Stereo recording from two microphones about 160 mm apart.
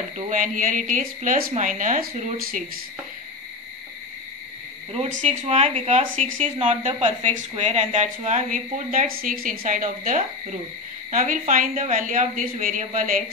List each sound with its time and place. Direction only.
0.3 s a woman's voice: 55° right (ahead or behind)
2.3 s speech: 65° right (ahead or behind)
4.9 s a woman's voice: 45° right (ahead or behind)